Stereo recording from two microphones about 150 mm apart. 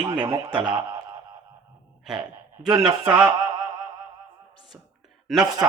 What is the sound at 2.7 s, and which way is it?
A man's voice, 25° right (ahead or behind).